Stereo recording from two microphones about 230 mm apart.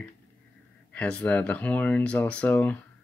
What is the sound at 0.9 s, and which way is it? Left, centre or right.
Speech, centre.